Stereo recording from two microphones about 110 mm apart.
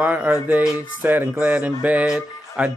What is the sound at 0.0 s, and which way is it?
Music, 15° right (ahead or behind).